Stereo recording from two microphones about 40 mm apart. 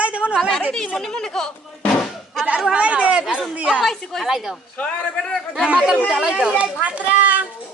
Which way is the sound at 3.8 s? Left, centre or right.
Centre.